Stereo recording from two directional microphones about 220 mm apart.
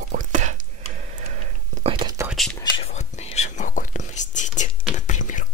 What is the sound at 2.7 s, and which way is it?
Whispering, 30° left (ahead or behind).